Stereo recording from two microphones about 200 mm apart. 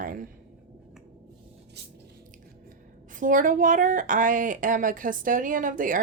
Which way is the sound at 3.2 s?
40° right (ahead or behind).